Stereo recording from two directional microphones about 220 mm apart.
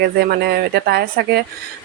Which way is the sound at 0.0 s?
45° right (ahead or behind).